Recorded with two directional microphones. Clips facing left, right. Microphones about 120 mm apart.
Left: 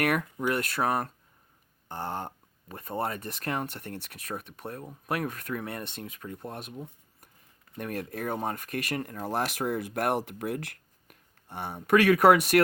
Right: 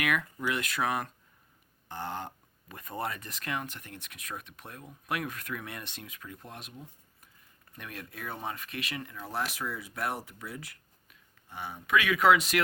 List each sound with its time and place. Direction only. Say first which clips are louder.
0.0 s speech: left 4 dB; 45° left (ahead or behind)
7.8 s speech: left 9 dB; 45° left (ahead or behind); by 11.2 s 65° left (ahead or behind)
11.7 s speech: left 7 dB; 45° left (ahead or behind)